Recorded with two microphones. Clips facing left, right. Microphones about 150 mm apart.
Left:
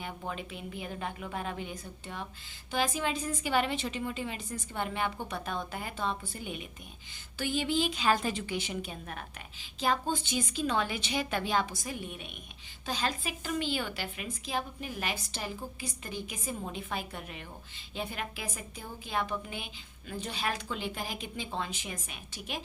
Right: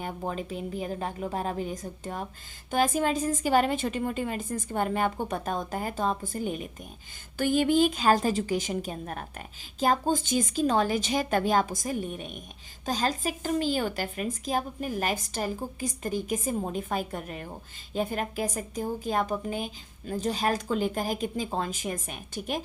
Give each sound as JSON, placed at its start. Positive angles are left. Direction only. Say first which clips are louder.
{"t": 0.0, "sound": "a woman's voice", "louder": "right 6 dB", "side_deg": -40}